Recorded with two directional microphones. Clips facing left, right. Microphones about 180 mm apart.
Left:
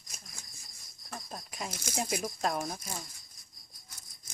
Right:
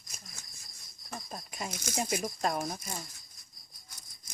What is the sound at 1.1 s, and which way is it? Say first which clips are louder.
Speech: right 1 dB; centre (ahead or behind).